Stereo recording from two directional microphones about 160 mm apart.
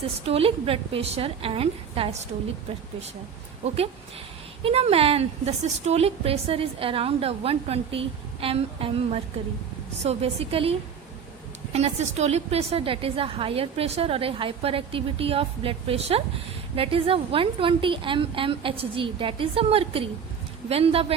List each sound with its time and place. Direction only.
0.3 s a woman's voice: 40° right (ahead or behind)
4.6 s a woman's voice: 40° right (ahead or behind)